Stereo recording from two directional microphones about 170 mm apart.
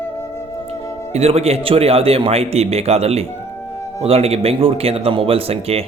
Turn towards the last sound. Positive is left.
turn(degrees=-35)  # may be behind; listen again after turning